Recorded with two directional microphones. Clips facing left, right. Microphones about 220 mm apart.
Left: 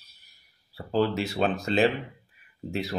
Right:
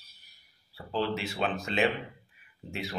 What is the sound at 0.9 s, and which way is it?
Speech, 40° left (ahead or behind).